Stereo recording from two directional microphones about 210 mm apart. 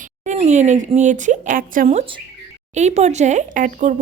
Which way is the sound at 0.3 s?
35° right (ahead or behind).